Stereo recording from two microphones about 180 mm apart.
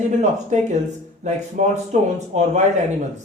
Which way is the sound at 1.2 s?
40° right (ahead or behind).